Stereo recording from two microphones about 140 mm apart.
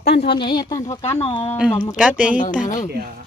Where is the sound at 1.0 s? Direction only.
50° left (ahead or behind).